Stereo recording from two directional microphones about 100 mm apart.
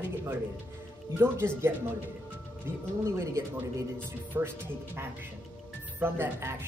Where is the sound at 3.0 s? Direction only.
25° right (ahead or behind).